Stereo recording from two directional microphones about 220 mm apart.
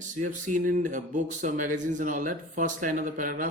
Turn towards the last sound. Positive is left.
turn(degrees=-35)  # may be behind; listen again after turning